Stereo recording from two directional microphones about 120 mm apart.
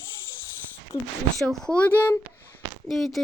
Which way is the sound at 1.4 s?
5° left (ahead or behind).